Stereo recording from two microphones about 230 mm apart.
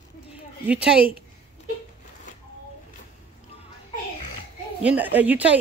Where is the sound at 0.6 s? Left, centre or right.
Centre.